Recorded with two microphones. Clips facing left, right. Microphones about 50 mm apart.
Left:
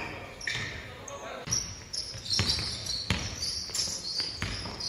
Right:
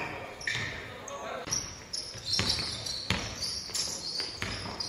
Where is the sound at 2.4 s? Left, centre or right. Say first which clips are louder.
Even; right.